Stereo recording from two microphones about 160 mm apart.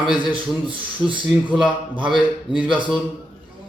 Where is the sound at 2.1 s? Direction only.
5° right (ahead or behind).